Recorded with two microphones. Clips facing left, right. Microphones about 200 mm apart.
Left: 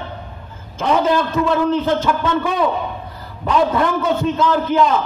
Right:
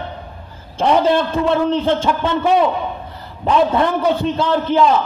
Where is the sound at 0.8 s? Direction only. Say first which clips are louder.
Right 2 dB; 30° right (ahead or behind).